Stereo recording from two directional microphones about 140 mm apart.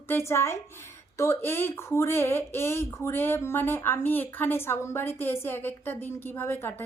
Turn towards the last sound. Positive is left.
turn(degrees=15)  # may be behind; listen again after turning